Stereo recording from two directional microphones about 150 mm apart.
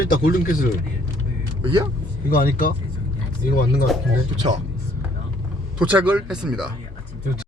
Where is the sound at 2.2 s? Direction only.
70° left (ahead or behind).